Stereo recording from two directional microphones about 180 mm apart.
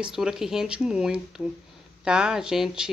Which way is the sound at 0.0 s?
5° right (ahead or behind).